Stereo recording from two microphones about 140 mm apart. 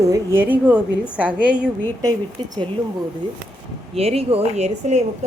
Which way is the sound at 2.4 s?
35° right (ahead or behind).